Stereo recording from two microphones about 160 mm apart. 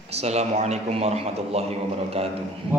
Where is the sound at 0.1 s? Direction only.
40° right (ahead or behind).